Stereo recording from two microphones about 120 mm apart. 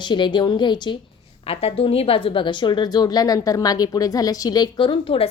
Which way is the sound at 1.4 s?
55° left (ahead or behind).